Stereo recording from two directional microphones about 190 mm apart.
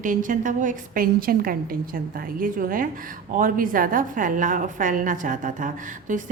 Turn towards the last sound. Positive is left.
turn(degrees=-45)  # may be behind; listen again after turning